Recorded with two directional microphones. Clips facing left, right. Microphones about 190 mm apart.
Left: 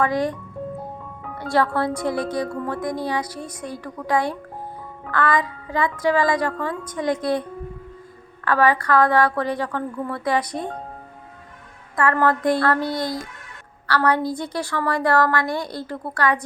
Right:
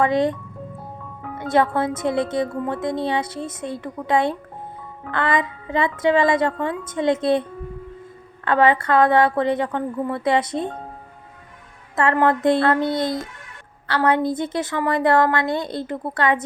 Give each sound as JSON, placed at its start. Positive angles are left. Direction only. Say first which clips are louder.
{"t": 0.0, "sound": "speech", "louder": "right 3 dB", "side_deg": -25}
{"t": 1.4, "sound": "speech", "louder": "right 2 dB", "side_deg": -20}
{"t": 8.4, "sound": "speech", "louder": "right 2 dB", "side_deg": -25}
{"t": 11.9, "sound": "speech", "louder": "right 1 dB", "side_deg": -25}